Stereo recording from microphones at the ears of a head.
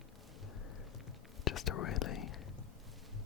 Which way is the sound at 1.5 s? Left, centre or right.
Left.